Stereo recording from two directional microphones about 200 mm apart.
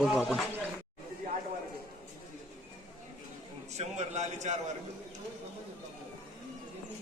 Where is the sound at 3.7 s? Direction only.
35° right (ahead or behind).